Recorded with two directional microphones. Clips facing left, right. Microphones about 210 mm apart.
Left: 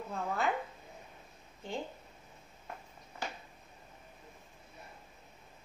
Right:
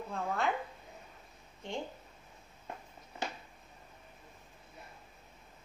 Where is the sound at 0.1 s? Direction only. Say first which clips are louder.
Even; 5° left (ahead or behind).